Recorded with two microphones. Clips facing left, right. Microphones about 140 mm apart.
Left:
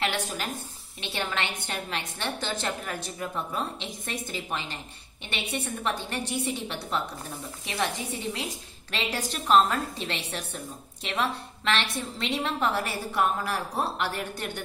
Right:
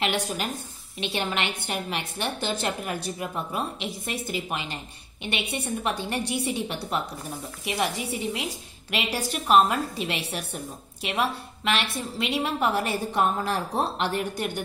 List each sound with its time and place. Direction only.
0.0 s a woman's voice: 20° right (ahead or behind)